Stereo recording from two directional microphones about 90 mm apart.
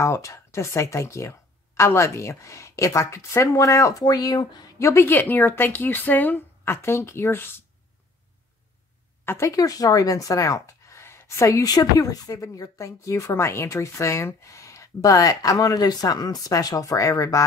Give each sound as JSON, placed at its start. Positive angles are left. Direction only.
{"t": 0.0, "sound": "speech", "side_deg": 35}
{"t": 4.7, "sound": "speech", "side_deg": 30}
{"t": 9.2, "sound": "a woman's voice", "side_deg": 25}
{"t": 9.5, "sound": "speech", "side_deg": 40}